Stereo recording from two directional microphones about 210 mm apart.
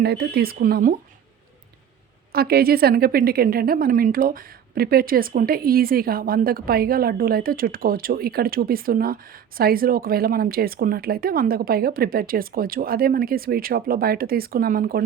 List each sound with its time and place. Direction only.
0.0 s a woman's voice: 50° right (ahead or behind)
2.3 s a woman's voice: 45° right (ahead or behind)